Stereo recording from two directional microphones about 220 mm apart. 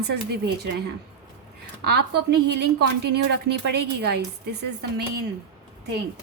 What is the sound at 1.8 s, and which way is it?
A woman's voice, 50° right (ahead or behind).